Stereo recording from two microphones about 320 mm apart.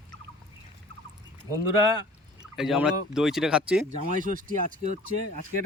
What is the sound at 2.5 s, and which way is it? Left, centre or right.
Speech, centre.